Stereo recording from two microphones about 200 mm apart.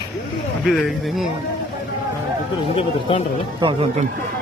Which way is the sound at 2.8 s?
30° left (ahead or behind).